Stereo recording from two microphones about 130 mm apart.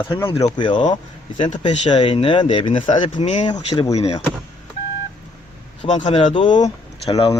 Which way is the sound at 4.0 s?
55° left (ahead or behind).